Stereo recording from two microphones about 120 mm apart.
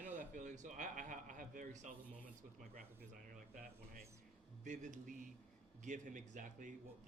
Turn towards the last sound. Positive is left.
turn(degrees=-90)